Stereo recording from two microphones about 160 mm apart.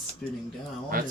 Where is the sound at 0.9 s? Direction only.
60° right (ahead or behind).